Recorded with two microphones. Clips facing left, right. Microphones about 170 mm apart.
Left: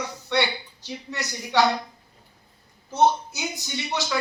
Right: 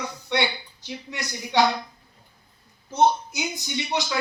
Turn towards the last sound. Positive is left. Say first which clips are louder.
# right 2 dB
turn(degrees=-20)  # may be behind; listen again after turning